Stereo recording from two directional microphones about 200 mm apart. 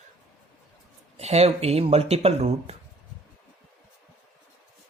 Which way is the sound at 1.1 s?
30° right (ahead or behind).